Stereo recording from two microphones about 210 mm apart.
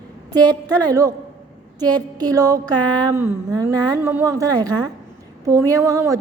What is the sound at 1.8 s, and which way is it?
A woman's voice, 20° right (ahead or behind).